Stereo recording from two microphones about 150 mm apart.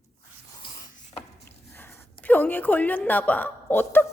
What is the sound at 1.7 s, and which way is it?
A woman's voice, 15° left (ahead or behind).